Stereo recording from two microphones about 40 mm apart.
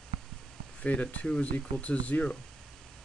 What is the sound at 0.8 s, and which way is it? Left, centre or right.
Speech, left.